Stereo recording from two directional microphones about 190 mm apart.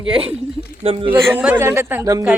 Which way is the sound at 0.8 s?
30° right (ahead or behind).